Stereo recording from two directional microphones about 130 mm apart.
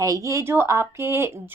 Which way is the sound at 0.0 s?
25° right (ahead or behind).